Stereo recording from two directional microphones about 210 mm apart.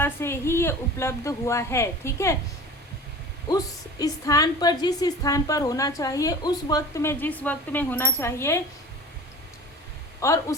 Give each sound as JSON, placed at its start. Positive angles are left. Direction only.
{"t": 0.0, "sound": "a woman's voice", "side_deg": 10}
{"t": 3.5, "sound": "a woman's voice", "side_deg": 20}
{"t": 10.2, "sound": "a woman's voice", "side_deg": 15}